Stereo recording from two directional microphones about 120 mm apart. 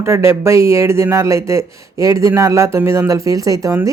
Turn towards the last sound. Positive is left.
turn(degrees=-30)  # may be behind; listen again after turning